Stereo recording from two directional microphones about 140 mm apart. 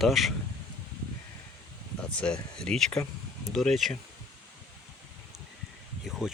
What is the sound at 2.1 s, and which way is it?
Speech, 5° left (ahead or behind).